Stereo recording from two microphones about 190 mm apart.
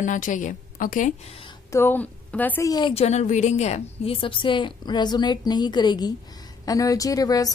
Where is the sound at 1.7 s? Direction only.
10° left (ahead or behind).